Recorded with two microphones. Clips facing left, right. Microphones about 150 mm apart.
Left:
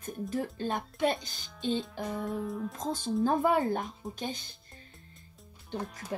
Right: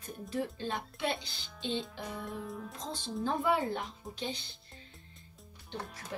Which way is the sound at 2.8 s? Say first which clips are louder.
Left 8 dB; 45° left (ahead or behind).